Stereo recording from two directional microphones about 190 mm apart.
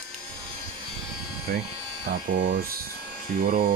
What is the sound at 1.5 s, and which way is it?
Speech, 50° right (ahead or behind).